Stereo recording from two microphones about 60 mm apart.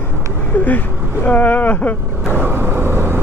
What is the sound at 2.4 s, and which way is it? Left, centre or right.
Vehicle, right.